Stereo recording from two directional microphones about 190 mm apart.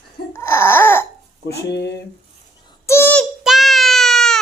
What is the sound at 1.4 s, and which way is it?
Speech, 60° left (ahead or behind).